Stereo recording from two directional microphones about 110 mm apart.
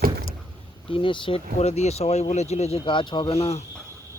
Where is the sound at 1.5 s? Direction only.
85° left.